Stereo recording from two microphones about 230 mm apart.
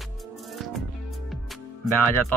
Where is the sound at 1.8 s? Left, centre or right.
Centre.